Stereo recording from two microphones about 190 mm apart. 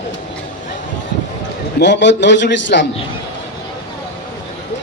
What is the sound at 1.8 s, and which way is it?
A man's voice, 70° left (ahead or behind).